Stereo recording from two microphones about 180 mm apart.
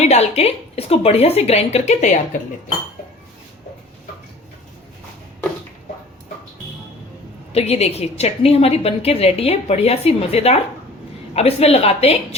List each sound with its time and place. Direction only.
0.0 s a woman's voice: 35° left (ahead or behind)
7.5 s a woman's voice: 35° left (ahead or behind)